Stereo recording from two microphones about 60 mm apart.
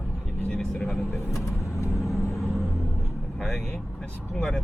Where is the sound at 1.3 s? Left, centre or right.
Left.